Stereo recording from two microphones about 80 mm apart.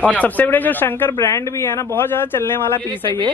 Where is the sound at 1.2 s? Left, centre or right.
Left.